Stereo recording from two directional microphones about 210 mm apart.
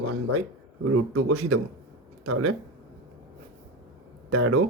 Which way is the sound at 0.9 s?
90° right.